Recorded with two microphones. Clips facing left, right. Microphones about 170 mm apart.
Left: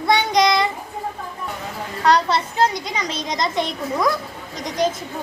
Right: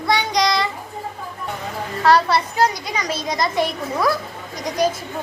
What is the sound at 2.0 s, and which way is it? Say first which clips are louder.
A child's voice: right 2 dB; 20° left (ahead or behind).